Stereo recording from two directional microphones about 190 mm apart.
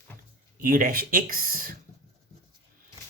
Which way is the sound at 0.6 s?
45° right (ahead or behind).